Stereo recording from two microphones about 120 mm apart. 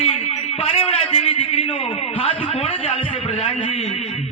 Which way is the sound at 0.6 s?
55° left (ahead or behind).